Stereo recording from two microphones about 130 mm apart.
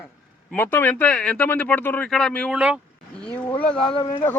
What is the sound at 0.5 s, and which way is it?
A man's voice, 15° left (ahead or behind).